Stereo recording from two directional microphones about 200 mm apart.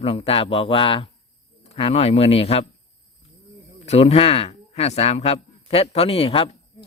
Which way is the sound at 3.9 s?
35° left (ahead or behind).